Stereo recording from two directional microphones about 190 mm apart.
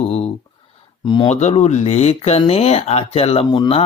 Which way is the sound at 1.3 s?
35° left (ahead or behind).